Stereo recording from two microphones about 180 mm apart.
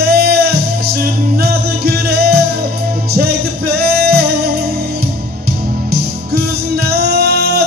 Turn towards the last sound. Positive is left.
turn(degrees=-60)  # may be behind; listen again after turning